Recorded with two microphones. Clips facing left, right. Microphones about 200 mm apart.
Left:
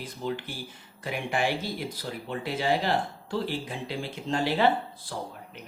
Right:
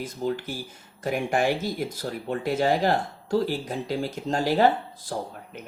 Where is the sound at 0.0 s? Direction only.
45° right (ahead or behind).